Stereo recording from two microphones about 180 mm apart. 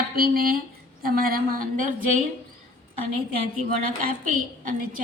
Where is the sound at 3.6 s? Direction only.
50° right (ahead or behind).